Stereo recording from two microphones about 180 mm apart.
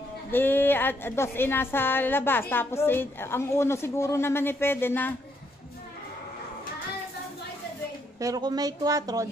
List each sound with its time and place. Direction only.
0.3 s a woman's voice: 10° left (ahead or behind)
8.2 s speech: 20° right (ahead or behind)